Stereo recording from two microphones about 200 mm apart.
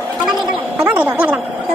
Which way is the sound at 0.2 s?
5° right (ahead or behind).